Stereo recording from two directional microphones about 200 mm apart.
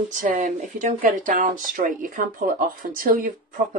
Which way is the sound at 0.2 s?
40° right (ahead or behind).